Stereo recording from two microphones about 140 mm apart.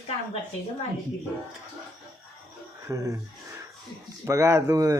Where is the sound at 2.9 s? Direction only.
25° right (ahead or behind).